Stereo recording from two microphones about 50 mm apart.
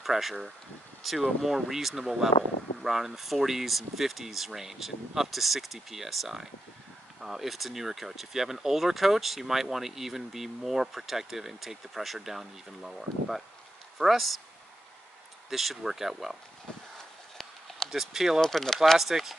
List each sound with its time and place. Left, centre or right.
0.0 s speech: centre
15.5 s speech: centre
17.4 s a sound: centre
17.8 s speech: centre
18.4 s speech: centre
18.9 s speech: centre